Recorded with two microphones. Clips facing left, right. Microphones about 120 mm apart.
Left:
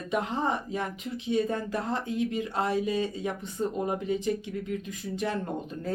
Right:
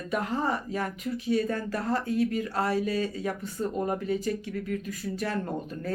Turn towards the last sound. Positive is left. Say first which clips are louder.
# even
turn(degrees=20)  # may be behind; listen again after turning